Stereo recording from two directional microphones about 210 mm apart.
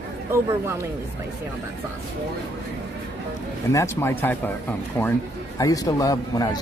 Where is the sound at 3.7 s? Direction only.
15° left (ahead or behind).